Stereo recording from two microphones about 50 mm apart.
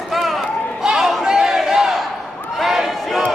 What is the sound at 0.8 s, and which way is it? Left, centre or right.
Chatter, centre.